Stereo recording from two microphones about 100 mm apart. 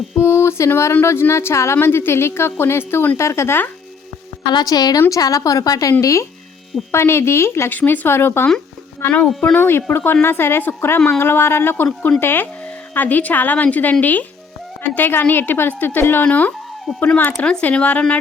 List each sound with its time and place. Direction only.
0.2 s a sound: 25° left (ahead or behind)
0.9 s a woman's voice: 25° left (ahead or behind)
4.5 s a woman's voice: 40° left (ahead or behind); by 18.2 s 15° left (ahead or behind)